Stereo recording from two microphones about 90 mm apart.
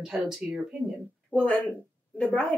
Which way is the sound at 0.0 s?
5° right (ahead or behind).